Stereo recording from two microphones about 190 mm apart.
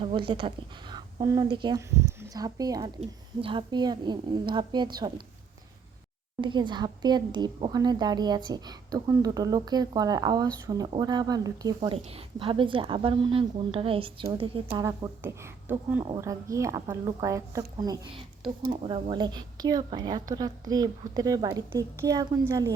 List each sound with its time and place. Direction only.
0.0 s a woman's voice: 25° right (ahead or behind)
6.4 s a woman's voice: 25° right (ahead or behind)
14.8 s a woman's voice: 15° right (ahead or behind)
16.0 s a woman's voice: 20° right (ahead or behind)